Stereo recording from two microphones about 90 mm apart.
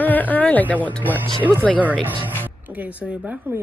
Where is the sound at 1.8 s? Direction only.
20° right (ahead or behind).